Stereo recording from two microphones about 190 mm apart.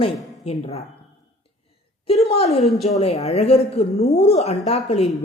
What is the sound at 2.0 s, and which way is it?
A woman's voice, 30° left (ahead or behind).